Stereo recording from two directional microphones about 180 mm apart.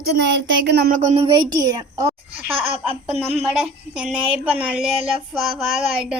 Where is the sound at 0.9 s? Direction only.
40° right (ahead or behind).